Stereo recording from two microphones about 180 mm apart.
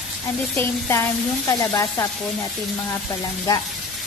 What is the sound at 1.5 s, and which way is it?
Speech, 15° left (ahead or behind).